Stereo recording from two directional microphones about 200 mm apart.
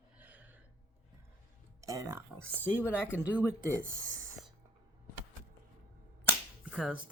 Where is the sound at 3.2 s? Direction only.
5° right (ahead or behind).